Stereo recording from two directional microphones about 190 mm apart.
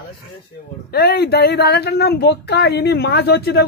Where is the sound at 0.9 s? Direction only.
55° left (ahead or behind).